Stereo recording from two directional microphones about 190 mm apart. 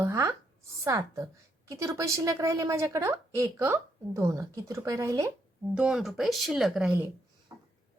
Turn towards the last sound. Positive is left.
turn(degrees=-15)  # may be behind; listen again after turning